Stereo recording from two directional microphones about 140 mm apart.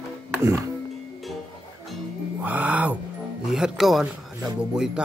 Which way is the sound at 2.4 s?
10° right (ahead or behind).